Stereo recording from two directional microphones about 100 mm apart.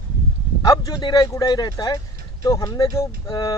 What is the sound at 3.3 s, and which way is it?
Speech, 45° left (ahead or behind).